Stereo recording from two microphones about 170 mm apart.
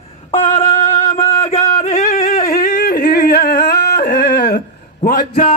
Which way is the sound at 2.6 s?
65° left (ahead or behind).